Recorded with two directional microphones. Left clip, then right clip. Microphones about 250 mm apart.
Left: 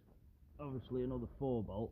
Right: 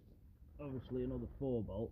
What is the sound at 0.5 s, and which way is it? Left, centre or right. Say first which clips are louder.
Speech: left 1 dB; centre.